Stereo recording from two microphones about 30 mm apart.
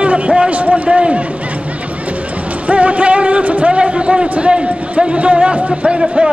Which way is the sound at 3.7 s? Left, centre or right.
Right.